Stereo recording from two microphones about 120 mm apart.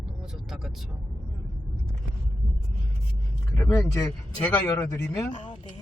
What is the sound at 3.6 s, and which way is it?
Speech, 25° left (ahead or behind).